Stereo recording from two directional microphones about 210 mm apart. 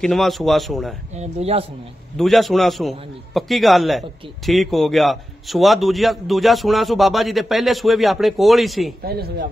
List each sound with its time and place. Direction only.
0.0 s a man's voice: centre (ahead or behind)
1.1 s speech: 30° right (ahead or behind)
2.1 s a man's voice: centre (ahead or behind)
9.0 s speech: 45° right (ahead or behind)